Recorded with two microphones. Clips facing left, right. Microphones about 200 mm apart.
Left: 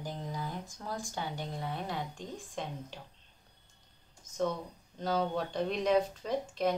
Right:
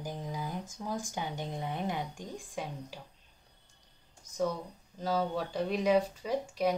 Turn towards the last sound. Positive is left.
turn(degrees=-10)  # may be behind; listen again after turning